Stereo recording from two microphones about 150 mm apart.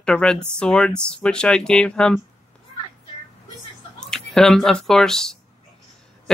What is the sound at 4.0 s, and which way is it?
Speech, 5° left (ahead or behind).